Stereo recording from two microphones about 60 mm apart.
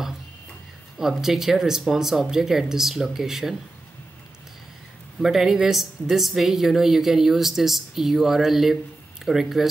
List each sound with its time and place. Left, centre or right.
1.2 s speech: centre
5.2 s a woman's voice: centre